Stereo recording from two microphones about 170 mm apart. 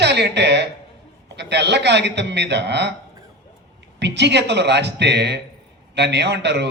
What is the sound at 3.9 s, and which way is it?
A man's voice, 85° right.